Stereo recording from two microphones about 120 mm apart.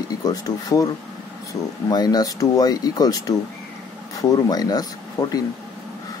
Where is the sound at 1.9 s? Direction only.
35° left (ahead or behind).